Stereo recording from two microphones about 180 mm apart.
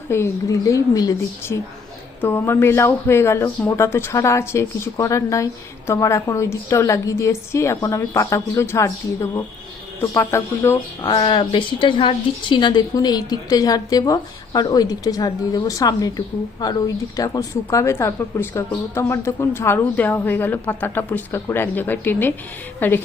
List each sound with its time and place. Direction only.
0.1 s speech: 15° left (ahead or behind)